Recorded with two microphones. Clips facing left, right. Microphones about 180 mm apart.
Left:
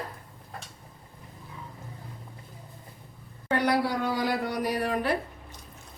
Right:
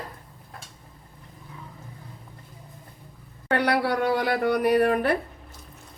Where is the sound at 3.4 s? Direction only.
65° right (ahead or behind).